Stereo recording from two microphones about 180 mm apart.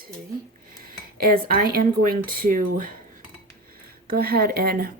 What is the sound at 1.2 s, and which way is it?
Speech, 50° right (ahead or behind).